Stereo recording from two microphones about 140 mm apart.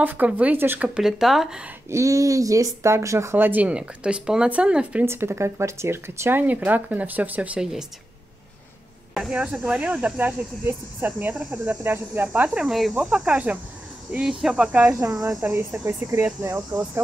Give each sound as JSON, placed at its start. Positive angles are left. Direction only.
{"t": 0.0, "sound": "speech", "side_deg": -10}
{"t": 1.9, "sound": "speech", "side_deg": -20}
{"t": 9.1, "sound": "speech", "side_deg": -5}